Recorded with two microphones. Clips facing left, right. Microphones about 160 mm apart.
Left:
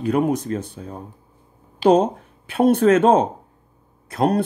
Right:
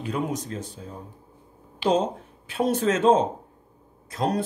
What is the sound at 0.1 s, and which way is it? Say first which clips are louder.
Speech: left 9 dB; 60° left (ahead or behind).